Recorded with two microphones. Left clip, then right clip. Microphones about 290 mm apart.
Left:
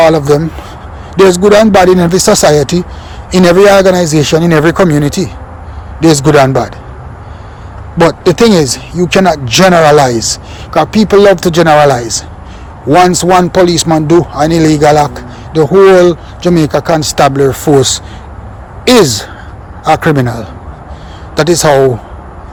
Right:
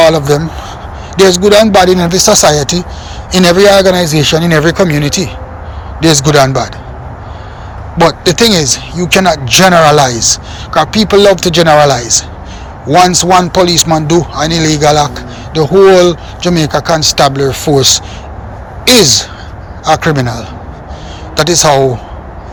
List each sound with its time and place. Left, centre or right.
0.0 s speech: left
7.9 s speech: left
18.9 s speech: left